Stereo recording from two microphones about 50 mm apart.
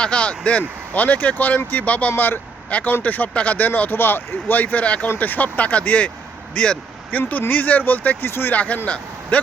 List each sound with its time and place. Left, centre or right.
0.0 s speech: left
2.6 s speech: left
3.8 s speech: left
5.0 s speech: left
7.2 s speech: left
8.2 s speech: left
8.5 s speech: left